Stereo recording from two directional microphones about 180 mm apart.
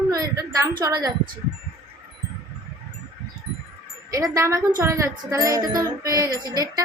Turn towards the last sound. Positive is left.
turn(degrees=-20)  # may be behind; listen again after turning